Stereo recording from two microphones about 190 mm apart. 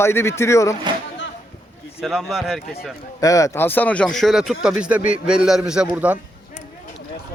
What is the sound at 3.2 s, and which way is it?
Speech, 15° left (ahead or behind).